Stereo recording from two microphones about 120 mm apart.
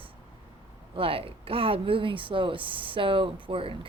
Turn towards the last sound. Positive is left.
turn(degrees=-50)  # may be behind; listen again after turning